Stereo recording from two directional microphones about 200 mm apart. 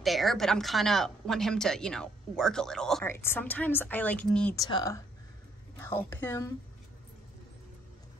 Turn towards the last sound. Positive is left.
turn(degrees=10)  # may be behind; listen again after turning